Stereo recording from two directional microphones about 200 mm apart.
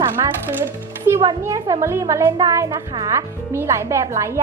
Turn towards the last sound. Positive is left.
turn(degrees=-15)  # may be behind; listen again after turning